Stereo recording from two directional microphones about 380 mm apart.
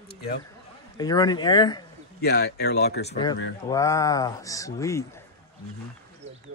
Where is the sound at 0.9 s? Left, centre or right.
Centre.